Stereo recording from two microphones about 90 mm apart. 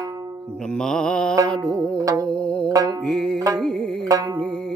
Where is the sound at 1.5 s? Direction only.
10° left (ahead or behind).